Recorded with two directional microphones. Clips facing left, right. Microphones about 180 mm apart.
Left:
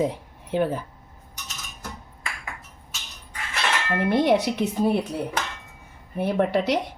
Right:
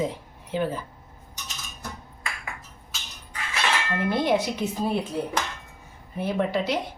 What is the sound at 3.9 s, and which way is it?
Speech, 65° left (ahead or behind).